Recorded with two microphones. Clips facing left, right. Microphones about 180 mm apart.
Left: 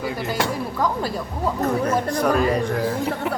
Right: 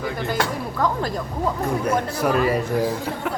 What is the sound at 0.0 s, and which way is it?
Speech, 10° left (ahead or behind).